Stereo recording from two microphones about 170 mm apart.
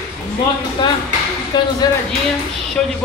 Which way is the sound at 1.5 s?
25° left (ahead or behind).